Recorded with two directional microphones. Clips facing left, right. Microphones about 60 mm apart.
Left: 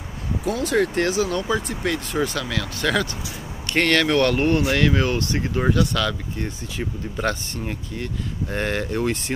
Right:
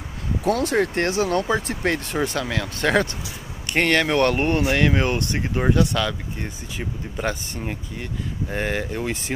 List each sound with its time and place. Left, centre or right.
0.5 s speech: right
0.7 s speech: right
2.1 s speech: right
3.6 s speech: centre